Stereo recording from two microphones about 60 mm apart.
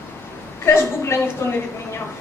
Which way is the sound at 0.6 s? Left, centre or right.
Left.